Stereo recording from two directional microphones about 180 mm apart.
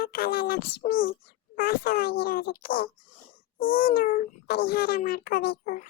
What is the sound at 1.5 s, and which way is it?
A child's voice, 55° left (ahead or behind).